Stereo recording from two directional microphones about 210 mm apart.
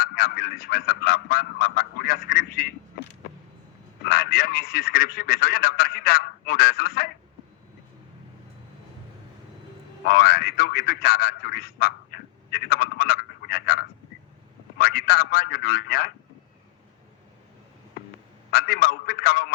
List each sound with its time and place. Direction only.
0.0 s speech: 45° left (ahead or behind)
4.0 s speech: 45° left (ahead or behind)
10.1 s speech: 45° left (ahead or behind)
18.5 s speech: 45° left (ahead or behind)